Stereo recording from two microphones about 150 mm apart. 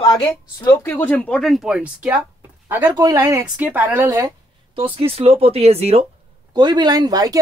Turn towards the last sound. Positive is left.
turn(degrees=-25)  # may be behind; listen again after turning